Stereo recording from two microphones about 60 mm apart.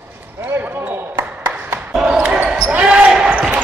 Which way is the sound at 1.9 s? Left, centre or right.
Centre.